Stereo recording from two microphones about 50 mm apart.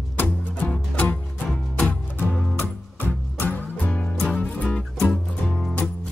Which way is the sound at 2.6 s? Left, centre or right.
Left.